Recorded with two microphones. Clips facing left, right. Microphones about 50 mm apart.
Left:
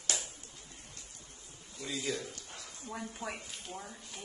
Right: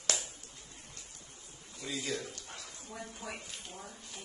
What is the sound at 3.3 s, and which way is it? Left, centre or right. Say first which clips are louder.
Speech: left 2 dB; centre.